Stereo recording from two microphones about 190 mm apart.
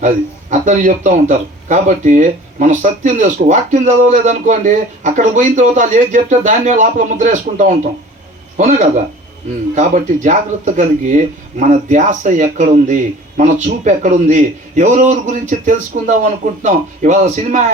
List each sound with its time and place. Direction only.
0.6 s speech: 40° right (ahead or behind)